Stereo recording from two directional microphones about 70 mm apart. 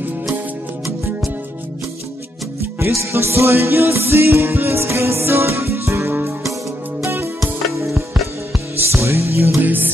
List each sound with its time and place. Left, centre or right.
2.8 s music: right
8.9 s music: right
9.6 s music: right